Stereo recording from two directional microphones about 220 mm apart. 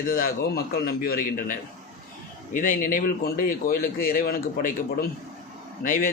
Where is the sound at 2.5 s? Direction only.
40° left (ahead or behind).